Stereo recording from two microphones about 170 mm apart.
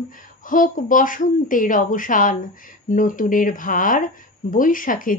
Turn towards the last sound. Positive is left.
turn(degrees=55)  # may be behind; listen again after turning